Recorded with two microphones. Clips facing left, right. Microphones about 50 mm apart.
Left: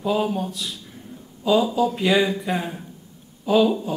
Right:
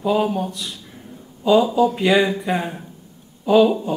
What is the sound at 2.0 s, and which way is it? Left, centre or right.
A man's voice, centre.